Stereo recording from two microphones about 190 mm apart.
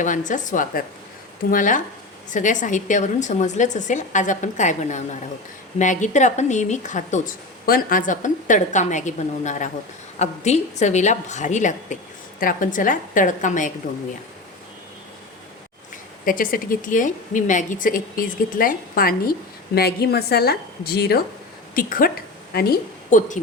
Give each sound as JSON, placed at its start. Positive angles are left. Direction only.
{"t": 0.0, "sound": "a woman's voice", "side_deg": 40}
{"t": 16.2, "sound": "a woman's voice", "side_deg": 45}